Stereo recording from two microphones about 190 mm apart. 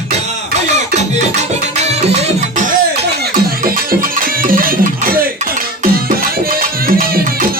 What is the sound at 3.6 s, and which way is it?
Music, 50° right (ahead or behind).